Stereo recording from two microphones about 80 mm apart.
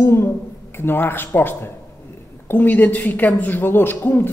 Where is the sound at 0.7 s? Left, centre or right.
Left.